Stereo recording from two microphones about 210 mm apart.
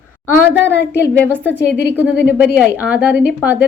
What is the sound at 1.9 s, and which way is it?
Speech, 10° right (ahead or behind).